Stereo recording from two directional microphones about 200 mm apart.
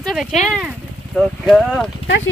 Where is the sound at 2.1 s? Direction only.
70° left (ahead or behind).